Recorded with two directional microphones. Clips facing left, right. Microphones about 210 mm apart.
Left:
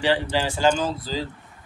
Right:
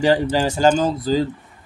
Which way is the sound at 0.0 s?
45° right (ahead or behind).